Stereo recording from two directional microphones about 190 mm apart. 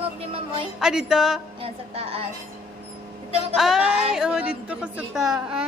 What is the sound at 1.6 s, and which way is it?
Speech, 30° right (ahead or behind).